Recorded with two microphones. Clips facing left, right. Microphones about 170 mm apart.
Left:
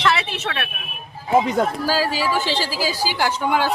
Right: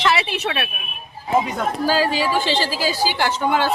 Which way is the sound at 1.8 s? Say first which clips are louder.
Right 2 dB; 5° left (ahead or behind).